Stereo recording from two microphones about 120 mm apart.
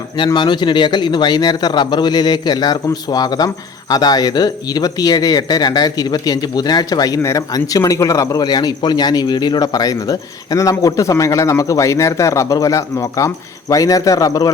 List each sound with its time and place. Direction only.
0.3 s speech: 40° left (ahead or behind)